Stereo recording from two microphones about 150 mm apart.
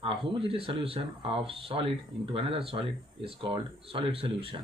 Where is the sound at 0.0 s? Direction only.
35° right (ahead or behind).